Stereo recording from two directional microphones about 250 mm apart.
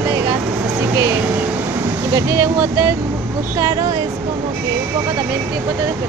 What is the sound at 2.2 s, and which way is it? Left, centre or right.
Speech, centre.